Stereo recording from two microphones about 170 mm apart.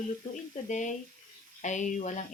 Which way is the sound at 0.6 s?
45° left (ahead or behind).